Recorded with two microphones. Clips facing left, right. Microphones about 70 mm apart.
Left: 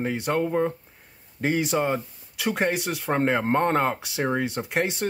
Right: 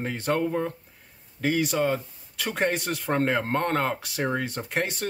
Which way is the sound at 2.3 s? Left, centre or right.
Centre.